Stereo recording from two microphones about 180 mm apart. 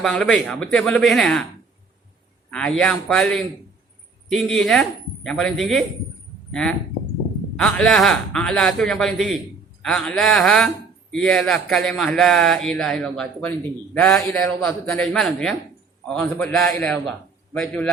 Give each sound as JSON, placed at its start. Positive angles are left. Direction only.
{"t": 0.0, "sound": "speech", "side_deg": 5}
{"t": 2.5, "sound": "speech", "side_deg": 5}
{"t": 4.6, "sound": "a man's voice", "side_deg": 0}